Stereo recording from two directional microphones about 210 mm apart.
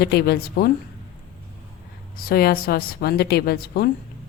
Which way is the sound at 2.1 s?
45° left (ahead or behind).